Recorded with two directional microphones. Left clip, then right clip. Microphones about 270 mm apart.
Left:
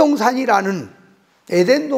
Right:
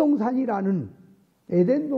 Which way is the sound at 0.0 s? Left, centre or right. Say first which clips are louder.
Left 8 dB; centre.